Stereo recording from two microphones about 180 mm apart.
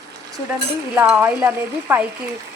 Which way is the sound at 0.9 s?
10° right (ahead or behind).